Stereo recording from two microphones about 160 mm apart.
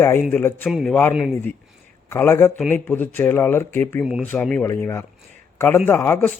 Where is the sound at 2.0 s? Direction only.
15° left (ahead or behind).